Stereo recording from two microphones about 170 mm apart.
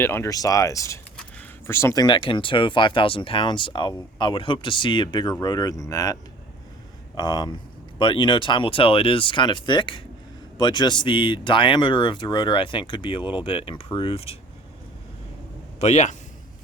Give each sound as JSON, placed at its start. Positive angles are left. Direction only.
{"t": 0.0, "sound": "speech", "side_deg": 15}
{"t": 7.2, "sound": "speech", "side_deg": 25}
{"t": 15.8, "sound": "a man's voice", "side_deg": 45}